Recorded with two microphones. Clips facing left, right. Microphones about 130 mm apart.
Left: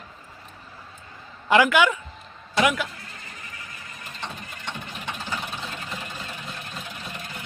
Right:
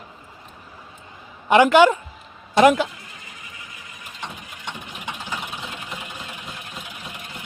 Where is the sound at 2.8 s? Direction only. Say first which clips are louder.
Right 1 dB; 15° right (ahead or behind).